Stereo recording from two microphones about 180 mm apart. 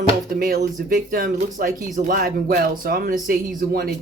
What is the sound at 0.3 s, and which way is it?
Speech, 60° right (ahead or behind).